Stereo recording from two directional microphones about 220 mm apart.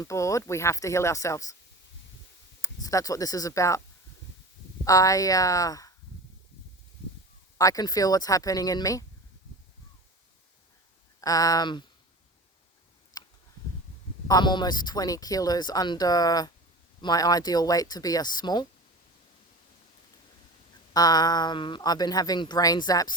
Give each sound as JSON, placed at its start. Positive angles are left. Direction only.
{"t": 0.0, "sound": "speech", "side_deg": 15}
{"t": 2.6, "sound": "speech", "side_deg": 15}
{"t": 4.9, "sound": "speech", "side_deg": 15}
{"t": 7.6, "sound": "speech", "side_deg": 15}
{"t": 11.2, "sound": "speech", "side_deg": 15}
{"t": 13.2, "sound": "a sound", "side_deg": 15}
{"t": 14.3, "sound": "speech", "side_deg": 20}
{"t": 20.9, "sound": "speech", "side_deg": 15}